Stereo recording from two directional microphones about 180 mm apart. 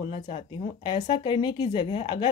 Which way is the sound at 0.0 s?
30° left (ahead or behind).